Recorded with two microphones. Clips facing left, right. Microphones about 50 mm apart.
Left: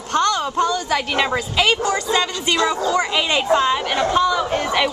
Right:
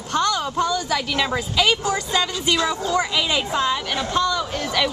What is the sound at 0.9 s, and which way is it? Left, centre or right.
A woman's voice, centre.